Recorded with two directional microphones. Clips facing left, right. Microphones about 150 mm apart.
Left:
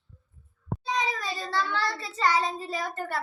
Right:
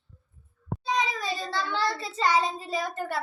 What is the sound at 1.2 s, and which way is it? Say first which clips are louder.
A child's voice: even; 20° right (ahead or behind).